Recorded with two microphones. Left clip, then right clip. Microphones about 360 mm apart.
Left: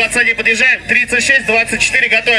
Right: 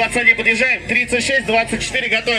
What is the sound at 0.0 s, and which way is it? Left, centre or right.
A man's voice, left.